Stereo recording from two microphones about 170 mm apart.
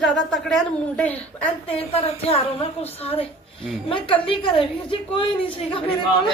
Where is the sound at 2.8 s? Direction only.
35° left (ahead or behind).